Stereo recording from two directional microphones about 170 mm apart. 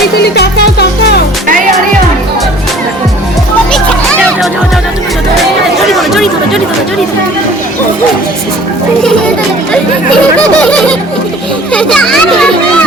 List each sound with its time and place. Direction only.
0.2 s music: 75° left (ahead or behind)
3.7 s music: 5° left (ahead or behind)
5.9 s chatter: centre (ahead or behind)
9.0 s a child's voice: 5° left (ahead or behind)
11.7 s children playing: 5° left (ahead or behind)